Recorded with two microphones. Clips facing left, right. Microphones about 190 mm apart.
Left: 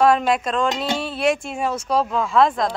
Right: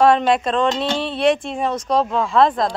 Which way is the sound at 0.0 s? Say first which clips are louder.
Right 2 dB; centre (ahead or behind).